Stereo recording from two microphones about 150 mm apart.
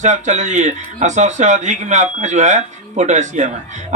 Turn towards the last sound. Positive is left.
turn(degrees=-55)  # may be behind; listen again after turning